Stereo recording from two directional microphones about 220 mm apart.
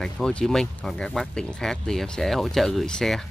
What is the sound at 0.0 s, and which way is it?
Speech, 5° left (ahead or behind).